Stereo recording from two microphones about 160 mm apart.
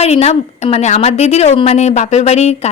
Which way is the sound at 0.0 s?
40° left (ahead or behind).